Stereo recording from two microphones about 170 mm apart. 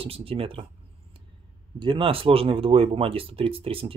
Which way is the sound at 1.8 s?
30° right (ahead or behind).